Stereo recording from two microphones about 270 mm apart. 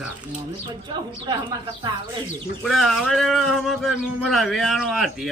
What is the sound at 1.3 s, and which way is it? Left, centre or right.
Speech, centre.